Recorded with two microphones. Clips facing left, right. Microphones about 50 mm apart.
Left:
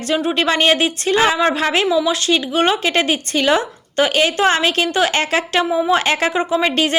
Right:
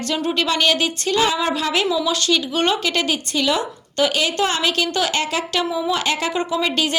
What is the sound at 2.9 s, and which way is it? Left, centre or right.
A woman's voice, left.